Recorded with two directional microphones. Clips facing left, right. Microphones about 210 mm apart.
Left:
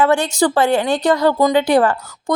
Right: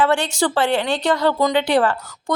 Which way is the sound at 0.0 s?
40° left (ahead or behind).